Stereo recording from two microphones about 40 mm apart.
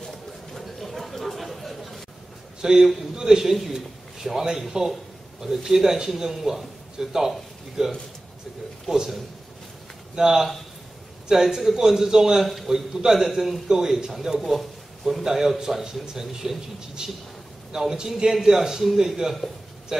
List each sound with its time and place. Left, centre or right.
0.0 s chatter: centre
2.6 s a man's voice: centre
8.9 s a man's voice: centre
11.4 s a man's voice: centre